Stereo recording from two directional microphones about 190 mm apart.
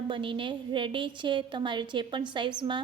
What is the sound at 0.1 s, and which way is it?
A woman's voice, 25° right (ahead or behind).